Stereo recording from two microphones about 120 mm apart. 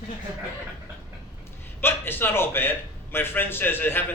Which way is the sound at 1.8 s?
20° left (ahead or behind).